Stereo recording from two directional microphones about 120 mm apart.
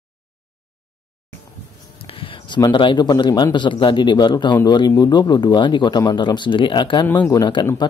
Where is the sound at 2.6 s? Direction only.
40° left (ahead or behind).